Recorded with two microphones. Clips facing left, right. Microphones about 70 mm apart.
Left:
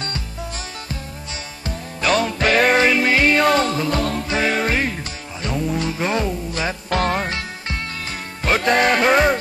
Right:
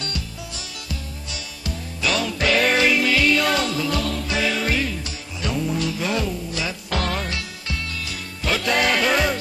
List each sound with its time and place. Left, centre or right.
2.0 s music: left